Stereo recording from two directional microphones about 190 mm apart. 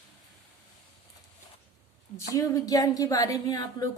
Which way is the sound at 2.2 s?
15° left (ahead or behind).